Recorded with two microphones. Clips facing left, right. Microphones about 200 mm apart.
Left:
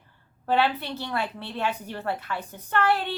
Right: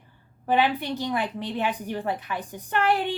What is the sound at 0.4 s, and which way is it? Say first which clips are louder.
A woman's voice: right 1 dB; 15° right (ahead or behind).